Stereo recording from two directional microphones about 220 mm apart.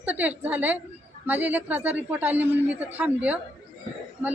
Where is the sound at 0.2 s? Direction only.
5° right (ahead or behind).